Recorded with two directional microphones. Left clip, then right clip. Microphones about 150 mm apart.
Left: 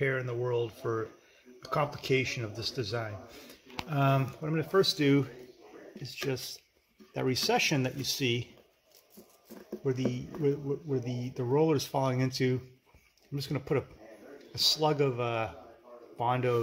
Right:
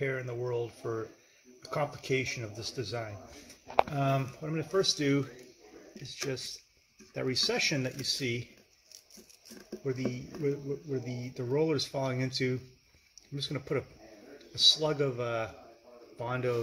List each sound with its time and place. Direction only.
0.0 s speech: 10° left (ahead or behind)
7.2 s speech: 15° left (ahead or behind)
9.7 s speech: 10° left (ahead or behind)